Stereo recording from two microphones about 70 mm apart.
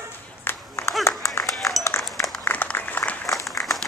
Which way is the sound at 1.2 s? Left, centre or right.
Left.